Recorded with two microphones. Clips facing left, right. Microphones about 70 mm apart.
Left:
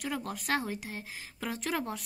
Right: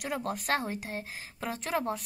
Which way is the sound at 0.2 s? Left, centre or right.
Right.